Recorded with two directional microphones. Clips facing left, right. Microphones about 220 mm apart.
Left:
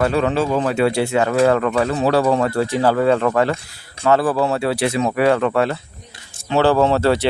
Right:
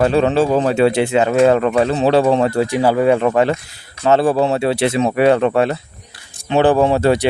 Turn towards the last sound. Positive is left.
turn(degrees=-15)  # may be behind; listen again after turning